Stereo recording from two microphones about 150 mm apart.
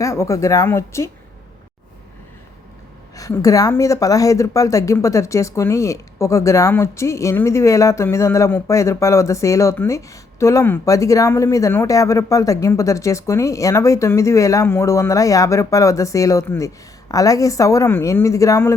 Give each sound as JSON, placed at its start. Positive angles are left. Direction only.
{"t": 0.0, "sound": "speech", "side_deg": 20}
{"t": 3.2, "sound": "speech", "side_deg": 20}